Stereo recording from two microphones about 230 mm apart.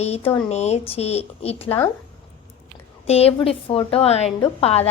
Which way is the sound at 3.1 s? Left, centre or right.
Left.